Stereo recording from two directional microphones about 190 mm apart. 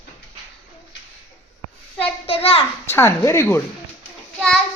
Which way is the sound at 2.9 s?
10° left (ahead or behind).